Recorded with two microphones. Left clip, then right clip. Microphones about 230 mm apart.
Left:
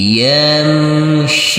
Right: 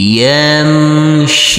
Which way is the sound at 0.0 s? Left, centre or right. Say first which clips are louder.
Right 2 dB; right.